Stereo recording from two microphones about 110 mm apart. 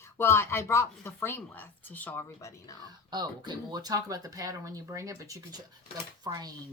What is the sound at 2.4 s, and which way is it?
Speech, 30° left (ahead or behind).